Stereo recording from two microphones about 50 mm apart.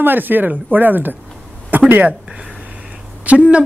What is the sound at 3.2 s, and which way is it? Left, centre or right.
Speech, right.